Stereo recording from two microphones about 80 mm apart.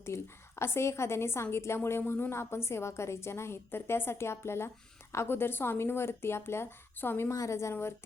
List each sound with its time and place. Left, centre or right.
0.0 s a woman's voice: left
7.3 s a woman's voice: left